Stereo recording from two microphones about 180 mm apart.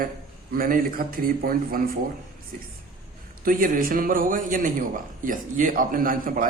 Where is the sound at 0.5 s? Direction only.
50° right (ahead or behind).